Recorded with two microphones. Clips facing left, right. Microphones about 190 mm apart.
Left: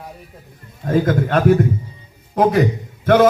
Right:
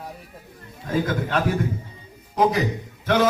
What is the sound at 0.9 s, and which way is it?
A man's voice, 50° left (ahead or behind).